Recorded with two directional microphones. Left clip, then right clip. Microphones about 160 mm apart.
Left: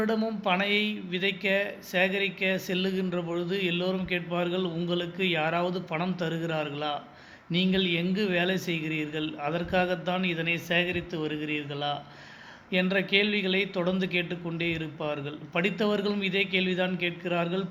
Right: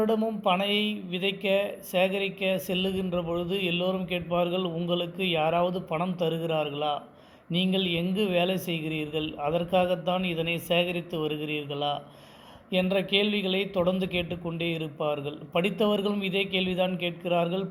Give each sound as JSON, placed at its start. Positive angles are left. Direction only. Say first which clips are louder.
{"t": 0.0, "sound": "speech", "louder": "right 3 dB", "side_deg": -20}